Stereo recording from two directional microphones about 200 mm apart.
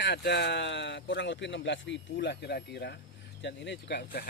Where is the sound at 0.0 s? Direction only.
60° left (ahead or behind).